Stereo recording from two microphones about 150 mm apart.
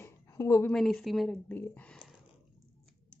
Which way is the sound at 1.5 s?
10° left (ahead or behind).